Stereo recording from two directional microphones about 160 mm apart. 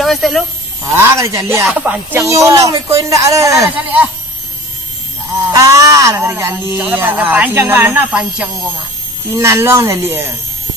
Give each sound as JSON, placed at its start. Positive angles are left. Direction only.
{"t": 0.0, "sound": "speech", "side_deg": 0}
{"t": 0.9, "sound": "speech", "side_deg": -15}
{"t": 1.6, "sound": "speech", "side_deg": -5}
{"t": 5.5, "sound": "speech", "side_deg": -20}